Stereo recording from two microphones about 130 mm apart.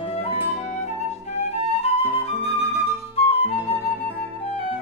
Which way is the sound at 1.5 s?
50° left (ahead or behind).